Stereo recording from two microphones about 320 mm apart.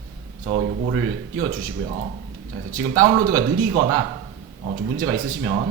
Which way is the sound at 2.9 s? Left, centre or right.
Right.